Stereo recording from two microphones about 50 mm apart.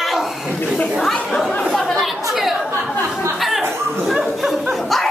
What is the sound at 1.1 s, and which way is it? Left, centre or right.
Speech, centre.